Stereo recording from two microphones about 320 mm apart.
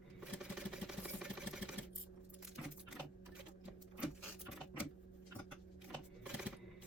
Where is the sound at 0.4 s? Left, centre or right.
Centre.